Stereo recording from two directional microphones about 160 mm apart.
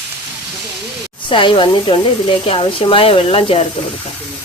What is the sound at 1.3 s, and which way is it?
Speech, 30° left (ahead or behind).